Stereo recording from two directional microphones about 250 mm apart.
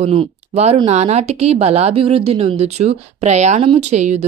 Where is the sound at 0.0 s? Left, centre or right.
Right.